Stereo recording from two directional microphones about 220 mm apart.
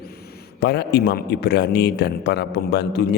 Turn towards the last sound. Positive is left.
turn(degrees=50)  # may be behind; listen again after turning